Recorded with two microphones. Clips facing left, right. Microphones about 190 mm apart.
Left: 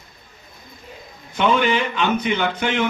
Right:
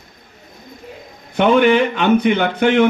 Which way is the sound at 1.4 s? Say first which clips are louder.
Right 6 dB; 55° right (ahead or behind).